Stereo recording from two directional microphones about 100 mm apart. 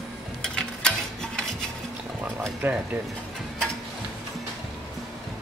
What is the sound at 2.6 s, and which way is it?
Speech, 15° right (ahead or behind).